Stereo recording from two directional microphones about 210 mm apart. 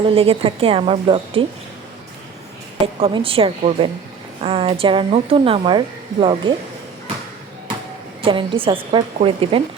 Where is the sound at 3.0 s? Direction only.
25° right (ahead or behind).